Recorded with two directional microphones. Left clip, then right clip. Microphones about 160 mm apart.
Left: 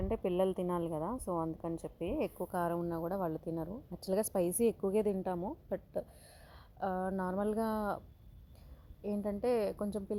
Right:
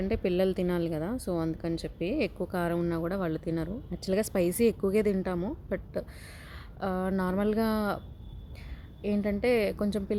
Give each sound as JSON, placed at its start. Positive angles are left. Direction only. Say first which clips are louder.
{"t": 0.0, "sound": "a woman's voice", "louder": "right 5 dB", "side_deg": 0}